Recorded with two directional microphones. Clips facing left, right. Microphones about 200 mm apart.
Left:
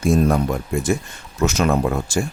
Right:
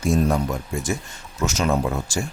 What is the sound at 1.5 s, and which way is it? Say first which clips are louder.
Speech: left 3 dB; 60° left (ahead or behind).